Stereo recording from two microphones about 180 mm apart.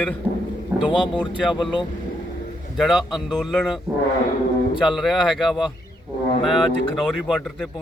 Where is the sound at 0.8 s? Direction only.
25° left (ahead or behind).